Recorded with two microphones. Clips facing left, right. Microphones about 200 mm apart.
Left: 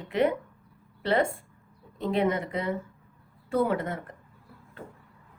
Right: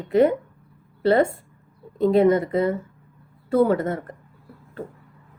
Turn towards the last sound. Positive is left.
turn(degrees=-40)  # may be behind; listen again after turning